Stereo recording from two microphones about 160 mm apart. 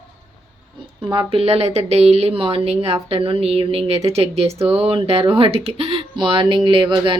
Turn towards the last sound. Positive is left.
turn(degrees=-30)  # may be behind; listen again after turning